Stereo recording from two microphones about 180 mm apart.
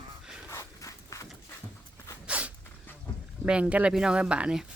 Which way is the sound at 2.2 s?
5° right (ahead or behind).